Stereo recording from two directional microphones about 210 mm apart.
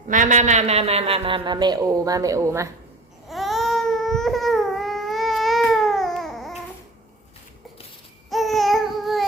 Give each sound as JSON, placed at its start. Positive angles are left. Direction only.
{"t": 0.1, "sound": "a man's voice", "side_deg": -35}
{"t": 3.2, "sound": "baby cry", "side_deg": 0}
{"t": 8.3, "sound": "babbling", "side_deg": 0}